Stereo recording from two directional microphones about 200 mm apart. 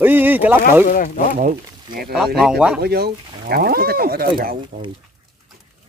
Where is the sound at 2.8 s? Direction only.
55° right (ahead or behind).